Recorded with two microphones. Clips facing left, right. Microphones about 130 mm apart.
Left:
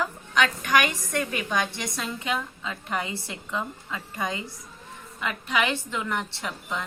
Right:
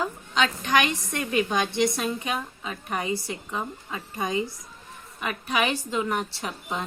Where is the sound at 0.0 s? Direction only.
25° right (ahead or behind).